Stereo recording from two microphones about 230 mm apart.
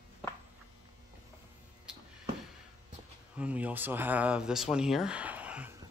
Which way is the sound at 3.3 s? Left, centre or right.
Centre.